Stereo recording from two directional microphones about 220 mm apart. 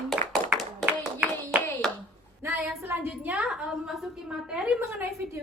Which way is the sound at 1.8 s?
Centre (ahead or behind).